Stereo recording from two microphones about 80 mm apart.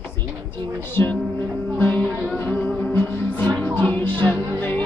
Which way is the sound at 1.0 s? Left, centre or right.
Left.